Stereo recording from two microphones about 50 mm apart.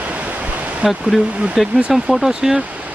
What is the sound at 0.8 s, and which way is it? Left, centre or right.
Speech, centre.